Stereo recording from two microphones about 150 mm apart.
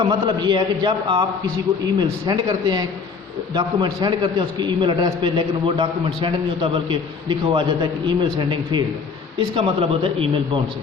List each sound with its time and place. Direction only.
0.0 s a man's voice: 30° right (ahead or behind)